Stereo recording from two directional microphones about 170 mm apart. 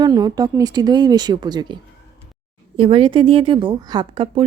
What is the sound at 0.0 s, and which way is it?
A woman's voice, 25° right (ahead or behind).